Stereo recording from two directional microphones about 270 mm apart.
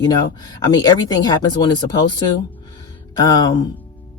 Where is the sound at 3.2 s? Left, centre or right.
Centre.